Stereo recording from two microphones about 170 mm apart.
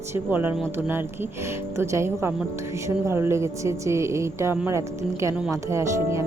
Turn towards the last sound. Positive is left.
turn(degrees=-15)  # may be behind; listen again after turning